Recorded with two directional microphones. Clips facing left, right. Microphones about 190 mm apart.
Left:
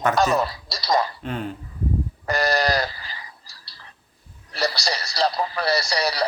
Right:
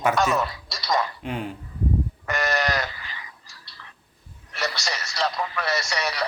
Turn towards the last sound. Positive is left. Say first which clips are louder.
# left 4 dB
turn(degrees=35)  # may be behind; listen again after turning